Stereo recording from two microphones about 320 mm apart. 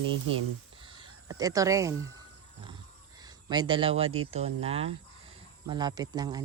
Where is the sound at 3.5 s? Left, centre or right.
Centre.